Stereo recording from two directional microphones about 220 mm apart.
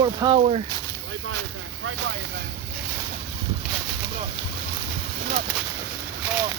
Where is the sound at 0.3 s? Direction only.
30° right (ahead or behind).